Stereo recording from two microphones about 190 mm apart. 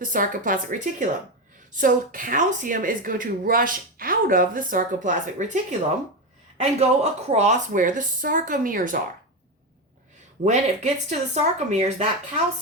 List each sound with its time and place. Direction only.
0.0 s a woman's voice: 45° right (ahead or behind)
6.6 s a woman's voice: 35° right (ahead or behind)
10.4 s speech: 35° right (ahead or behind)